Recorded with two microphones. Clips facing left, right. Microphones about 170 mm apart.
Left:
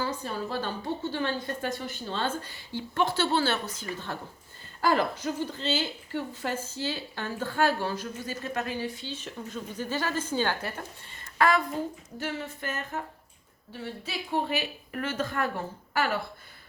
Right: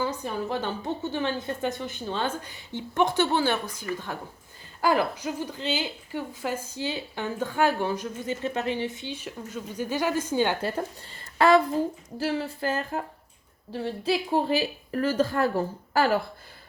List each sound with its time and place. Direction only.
0.0 s a woman's voice: 15° right (ahead or behind)
11.3 s a woman's voice: 25° right (ahead or behind)